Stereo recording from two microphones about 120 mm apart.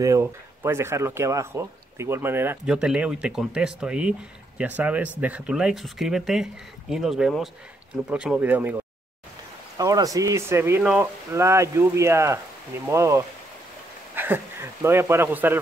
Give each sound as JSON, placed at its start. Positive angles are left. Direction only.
{"t": 0.0, "sound": "speech", "side_deg": -25}
{"t": 2.6, "sound": "speech", "side_deg": -5}
{"t": 9.8, "sound": "speech", "side_deg": -30}
{"t": 10.8, "sound": "speech", "side_deg": -5}
{"t": 11.3, "sound": "speech", "side_deg": -25}